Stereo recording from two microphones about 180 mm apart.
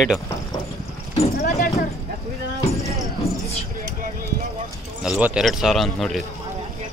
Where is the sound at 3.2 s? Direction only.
Centre (ahead or behind).